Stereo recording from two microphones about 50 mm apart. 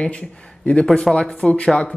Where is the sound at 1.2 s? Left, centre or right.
Left.